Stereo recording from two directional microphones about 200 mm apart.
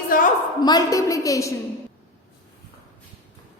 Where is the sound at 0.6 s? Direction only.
20° left (ahead or behind).